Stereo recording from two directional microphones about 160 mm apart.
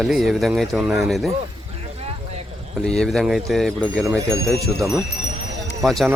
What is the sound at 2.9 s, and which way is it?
Speech, 5° left (ahead or behind).